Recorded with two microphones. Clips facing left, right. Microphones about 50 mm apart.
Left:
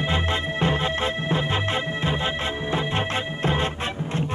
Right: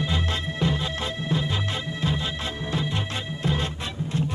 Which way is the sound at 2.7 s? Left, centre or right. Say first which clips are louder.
Left 4 dB; left.